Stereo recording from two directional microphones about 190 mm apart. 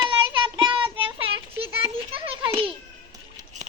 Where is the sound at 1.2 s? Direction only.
30° right (ahead or behind).